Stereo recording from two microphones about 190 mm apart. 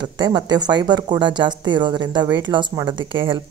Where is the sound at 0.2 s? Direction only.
20° right (ahead or behind).